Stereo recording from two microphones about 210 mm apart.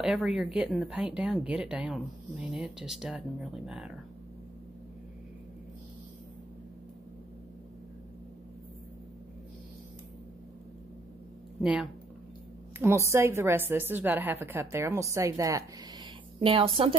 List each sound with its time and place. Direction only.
0.0 s speech: 5° right (ahead or behind)
11.6 s a woman's voice: 5° right (ahead or behind)
16.3 s a woman's voice: 25° right (ahead or behind)